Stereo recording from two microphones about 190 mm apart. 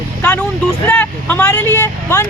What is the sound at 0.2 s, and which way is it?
Vehicle, 10° left (ahead or behind).